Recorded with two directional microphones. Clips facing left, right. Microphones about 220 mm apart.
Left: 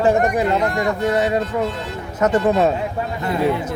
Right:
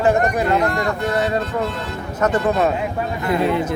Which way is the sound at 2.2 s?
25° left (ahead or behind).